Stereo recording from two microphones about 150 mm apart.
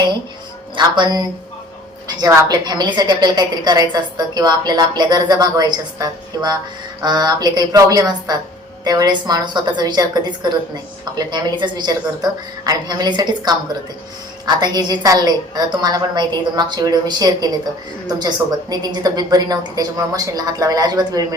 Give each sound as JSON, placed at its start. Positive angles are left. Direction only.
{"t": 0.8, "sound": "a woman's voice", "side_deg": -30}